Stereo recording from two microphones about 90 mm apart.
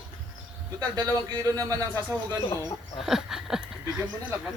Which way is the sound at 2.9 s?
5° right (ahead or behind).